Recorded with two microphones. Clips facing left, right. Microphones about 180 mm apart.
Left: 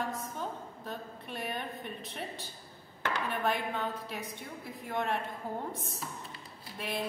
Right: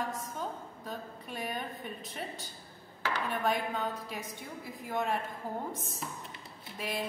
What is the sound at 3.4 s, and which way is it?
A woman's voice, centre (ahead or behind).